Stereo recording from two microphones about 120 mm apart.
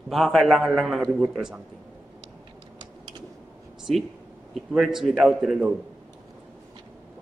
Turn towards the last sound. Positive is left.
turn(degrees=-5)  # may be behind; listen again after turning